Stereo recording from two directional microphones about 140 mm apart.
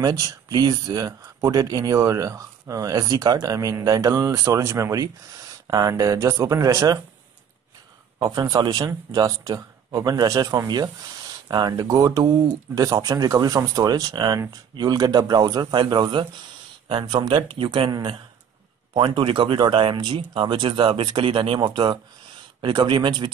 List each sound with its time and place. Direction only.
0.0 s speech: 25° right (ahead or behind)
8.2 s speech: 25° right (ahead or behind)